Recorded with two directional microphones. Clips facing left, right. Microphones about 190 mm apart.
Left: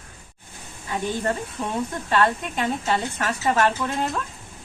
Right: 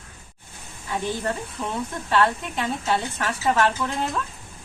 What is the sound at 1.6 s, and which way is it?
Speech, 10° left (ahead or behind).